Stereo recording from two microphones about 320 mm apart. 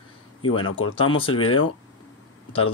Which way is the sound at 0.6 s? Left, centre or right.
Left.